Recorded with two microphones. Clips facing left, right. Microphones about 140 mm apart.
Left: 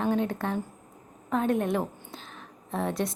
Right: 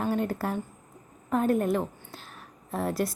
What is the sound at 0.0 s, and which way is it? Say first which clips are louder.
A woman's voice: left 1 dB; 5° right (ahead or behind).